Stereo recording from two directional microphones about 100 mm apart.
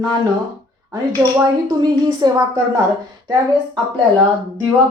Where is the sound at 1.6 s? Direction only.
50° right (ahead or behind).